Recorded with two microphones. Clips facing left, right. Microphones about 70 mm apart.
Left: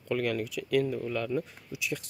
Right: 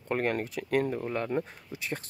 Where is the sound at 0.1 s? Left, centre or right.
Right.